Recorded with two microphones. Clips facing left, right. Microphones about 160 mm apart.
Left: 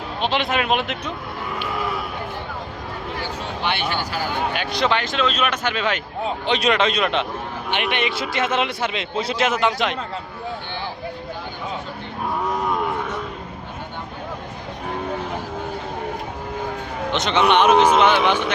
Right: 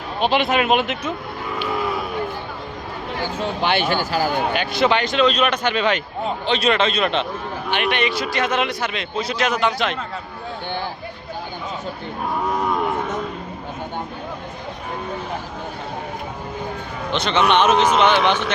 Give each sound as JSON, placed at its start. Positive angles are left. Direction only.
{"t": 0.2, "sound": "speech", "side_deg": -5}
{"t": 3.6, "sound": "speech", "side_deg": -45}
{"t": 4.5, "sound": "speech", "side_deg": 0}
{"t": 6.4, "sound": "a man's voice", "side_deg": 15}
{"t": 17.1, "sound": "a man's voice", "side_deg": 20}